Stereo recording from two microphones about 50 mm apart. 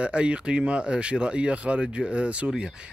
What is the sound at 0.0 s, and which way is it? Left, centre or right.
Speech, right.